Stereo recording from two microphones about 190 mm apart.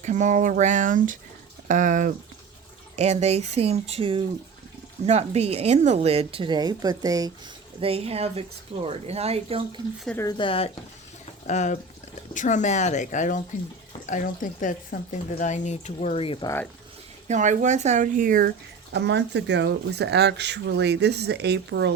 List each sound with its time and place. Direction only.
0.0 s a woman's voice: 40° right (ahead or behind); by 7.3 s 20° right (ahead or behind)
7.8 s a woman's voice: 30° right (ahead or behind)
10.2 s speech: 20° left (ahead or behind)
11.4 s speech: 40° left (ahead or behind)
17.2 s a woman's voice: 40° right (ahead or behind)
18.9 s speech: 65° right (ahead or behind)